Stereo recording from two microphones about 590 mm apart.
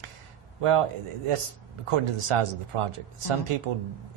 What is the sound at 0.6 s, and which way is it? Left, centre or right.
Speech, right.